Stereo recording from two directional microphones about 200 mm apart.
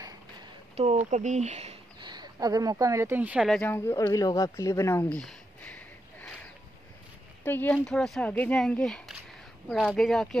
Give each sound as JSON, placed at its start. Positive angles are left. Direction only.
{"t": 0.8, "sound": "speech", "side_deg": -30}
{"t": 7.4, "sound": "speech", "side_deg": 10}